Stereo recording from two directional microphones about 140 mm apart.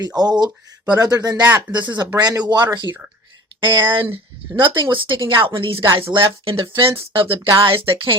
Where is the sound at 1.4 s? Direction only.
15° right (ahead or behind).